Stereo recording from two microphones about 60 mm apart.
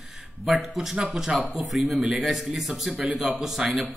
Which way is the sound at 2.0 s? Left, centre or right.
Centre.